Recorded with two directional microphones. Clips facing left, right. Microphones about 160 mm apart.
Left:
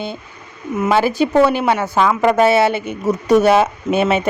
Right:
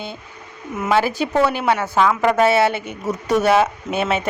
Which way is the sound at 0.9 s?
25° left (ahead or behind).